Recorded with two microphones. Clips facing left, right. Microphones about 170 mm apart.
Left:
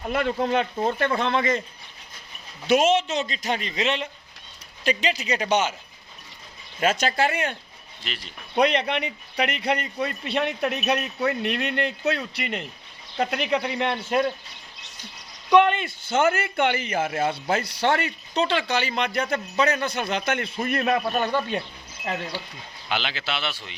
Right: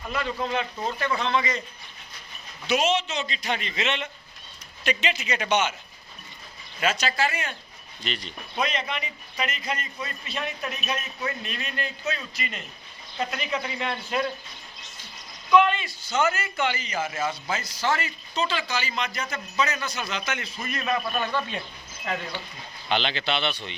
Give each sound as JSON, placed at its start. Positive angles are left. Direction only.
{"t": 0.0, "sound": "a man's voice", "side_deg": 55}
{"t": 2.6, "sound": "a man's voice", "side_deg": 50}
{"t": 6.7, "sound": "a man's voice", "side_deg": 50}
{"t": 8.0, "sound": "speech", "side_deg": 5}
{"t": 8.5, "sound": "a man's voice", "side_deg": 65}
{"t": 15.6, "sound": "a man's voice", "side_deg": 55}
{"t": 21.0, "sound": "speech", "side_deg": 35}
{"t": 22.9, "sound": "speech", "side_deg": 5}